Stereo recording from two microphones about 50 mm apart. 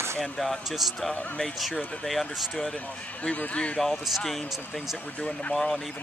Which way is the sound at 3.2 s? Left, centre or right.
Left.